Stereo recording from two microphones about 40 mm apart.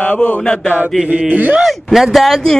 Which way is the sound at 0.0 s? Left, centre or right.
Left.